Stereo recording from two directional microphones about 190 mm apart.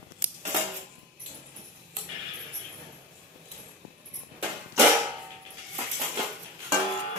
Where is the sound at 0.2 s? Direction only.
5° right (ahead or behind).